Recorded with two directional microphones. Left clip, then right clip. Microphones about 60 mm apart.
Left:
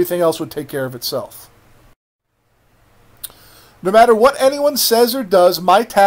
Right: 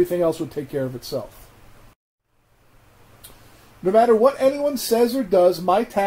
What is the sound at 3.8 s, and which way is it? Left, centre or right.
Speech, left.